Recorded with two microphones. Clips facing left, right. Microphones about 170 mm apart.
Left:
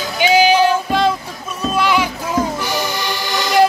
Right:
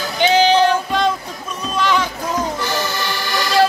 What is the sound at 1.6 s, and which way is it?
Music, 10° left (ahead or behind).